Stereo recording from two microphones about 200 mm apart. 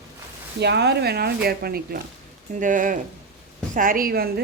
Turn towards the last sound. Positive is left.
turn(degrees=-50)  # may be behind; listen again after turning